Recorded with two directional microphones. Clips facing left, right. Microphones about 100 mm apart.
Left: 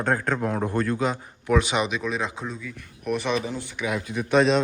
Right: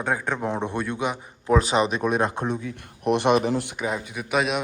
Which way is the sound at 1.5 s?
35° right (ahead or behind).